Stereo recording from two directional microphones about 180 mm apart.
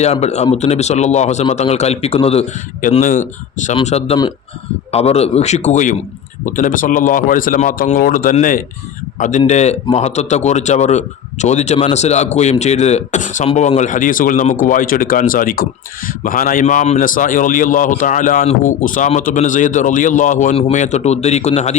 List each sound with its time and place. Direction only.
0.0 s a man's voice: 35° left (ahead or behind)
3.8 s a man's voice: 35° left (ahead or behind)